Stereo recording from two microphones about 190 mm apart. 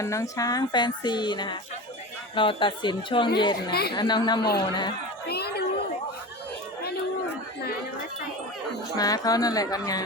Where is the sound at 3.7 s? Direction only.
55° left (ahead or behind).